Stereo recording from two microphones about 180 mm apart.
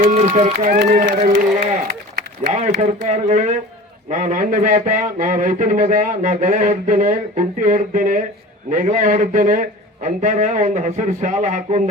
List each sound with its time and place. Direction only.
0.1 s speech: 35° right (ahead or behind)
0.6 s a man's voice: 50° right (ahead or behind)
1.9 s a sound: 70° right (ahead or behind)
2.5 s a man's voice: 40° right (ahead or behind)